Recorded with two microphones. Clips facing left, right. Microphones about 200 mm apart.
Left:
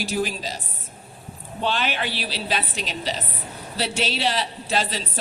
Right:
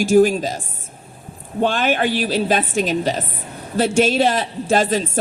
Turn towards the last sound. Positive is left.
turn(degrees=-50)  # may be behind; listen again after turning